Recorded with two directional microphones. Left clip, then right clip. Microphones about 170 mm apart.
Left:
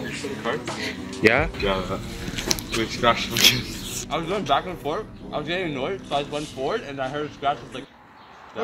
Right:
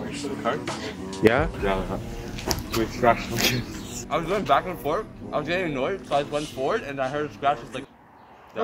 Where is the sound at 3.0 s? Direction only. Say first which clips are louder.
Left 3 dB; 45° right (ahead or behind).